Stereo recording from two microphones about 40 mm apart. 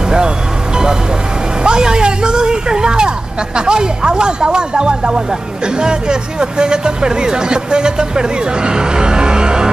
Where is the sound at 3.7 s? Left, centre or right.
Centre.